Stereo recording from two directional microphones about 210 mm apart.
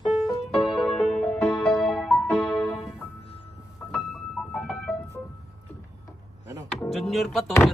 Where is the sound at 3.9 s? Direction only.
Centre (ahead or behind).